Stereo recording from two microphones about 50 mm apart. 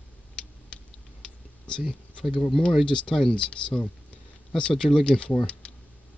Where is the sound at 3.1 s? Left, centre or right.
Centre.